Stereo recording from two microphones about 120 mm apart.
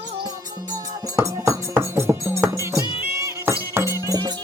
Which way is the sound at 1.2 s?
25° right (ahead or behind).